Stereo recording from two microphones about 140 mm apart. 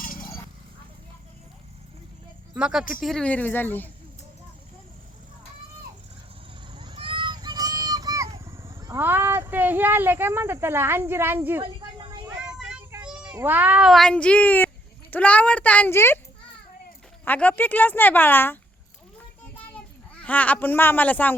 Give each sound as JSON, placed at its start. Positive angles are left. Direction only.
{"t": 0.0, "sound": "clip-clop", "side_deg": 85}
{"t": 2.6, "sound": "speech", "side_deg": -5}
{"t": 6.7, "sound": "vehicle", "side_deg": -35}
{"t": 8.7, "sound": "a sound", "side_deg": -20}
{"t": 11.6, "sound": "a sound", "side_deg": -35}
{"t": 12.5, "sound": "child singing", "side_deg": -5}
{"t": 13.1, "sound": "speech", "side_deg": -5}
{"t": 13.9, "sound": "speech", "side_deg": 5}
{"t": 17.2, "sound": "speech", "side_deg": 10}
{"t": 19.4, "sound": "a sound", "side_deg": 10}